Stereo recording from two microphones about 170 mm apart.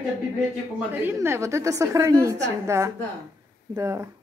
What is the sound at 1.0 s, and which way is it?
A woman's voice, 15° right (ahead or behind).